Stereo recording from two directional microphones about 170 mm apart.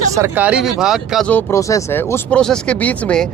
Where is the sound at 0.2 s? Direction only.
10° right (ahead or behind).